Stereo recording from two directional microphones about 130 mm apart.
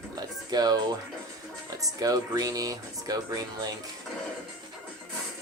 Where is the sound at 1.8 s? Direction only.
30° right (ahead or behind).